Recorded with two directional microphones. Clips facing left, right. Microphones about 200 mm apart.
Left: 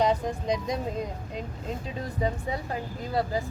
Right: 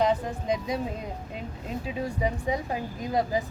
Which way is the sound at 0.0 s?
5° right (ahead or behind).